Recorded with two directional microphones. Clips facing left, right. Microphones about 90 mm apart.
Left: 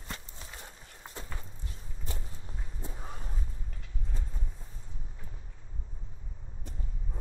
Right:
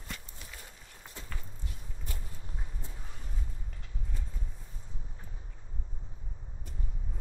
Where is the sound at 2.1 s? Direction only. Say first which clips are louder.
Left 4 dB; 25° left (ahead or behind).